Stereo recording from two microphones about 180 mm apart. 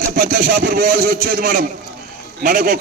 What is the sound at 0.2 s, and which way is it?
A man's voice, 50° right (ahead or behind).